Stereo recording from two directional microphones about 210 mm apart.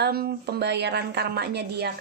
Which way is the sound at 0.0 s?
50° right (ahead or behind).